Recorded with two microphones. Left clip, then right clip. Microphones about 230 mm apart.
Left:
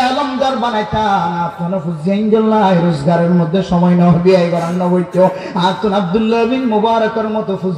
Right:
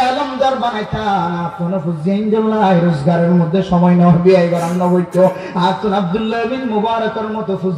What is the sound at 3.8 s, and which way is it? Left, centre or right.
Speech, left.